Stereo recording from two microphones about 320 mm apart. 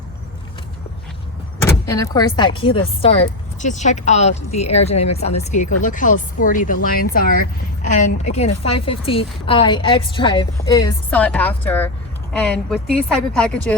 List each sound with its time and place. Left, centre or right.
1.6 s a woman's voice: centre